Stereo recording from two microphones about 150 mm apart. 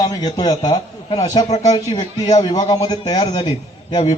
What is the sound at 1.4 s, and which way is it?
Speech, 45° left (ahead or behind).